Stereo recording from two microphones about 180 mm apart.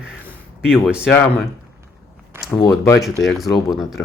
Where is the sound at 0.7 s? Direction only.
5° right (ahead or behind).